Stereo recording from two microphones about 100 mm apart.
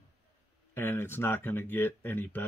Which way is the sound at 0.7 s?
25° left (ahead or behind).